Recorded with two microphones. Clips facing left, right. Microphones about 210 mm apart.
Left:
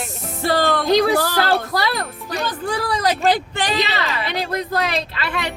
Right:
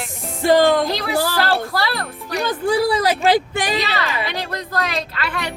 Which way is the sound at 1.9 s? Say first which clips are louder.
Even; centre (ahead or behind).